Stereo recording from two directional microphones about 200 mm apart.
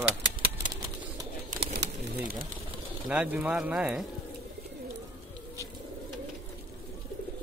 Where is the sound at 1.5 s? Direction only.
50° right (ahead or behind).